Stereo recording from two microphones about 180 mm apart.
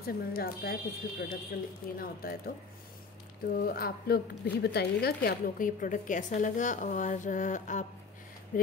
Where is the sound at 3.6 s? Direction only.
55° left (ahead or behind).